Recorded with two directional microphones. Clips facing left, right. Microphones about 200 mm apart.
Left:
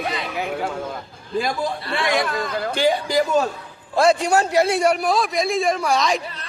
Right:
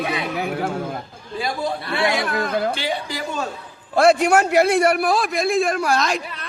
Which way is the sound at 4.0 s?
60° right (ahead or behind).